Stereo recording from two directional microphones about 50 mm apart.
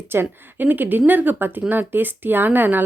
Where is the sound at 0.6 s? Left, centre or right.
Right.